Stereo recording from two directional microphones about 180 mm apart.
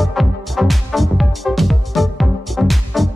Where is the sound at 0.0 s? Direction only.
Centre (ahead or behind).